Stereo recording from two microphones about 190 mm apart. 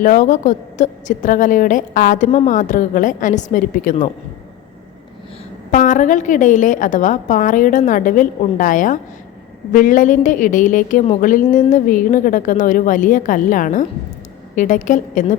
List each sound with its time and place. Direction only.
0.0 s a woman's voice: 45° left (ahead or behind)
5.7 s a woman's voice: 40° left (ahead or behind)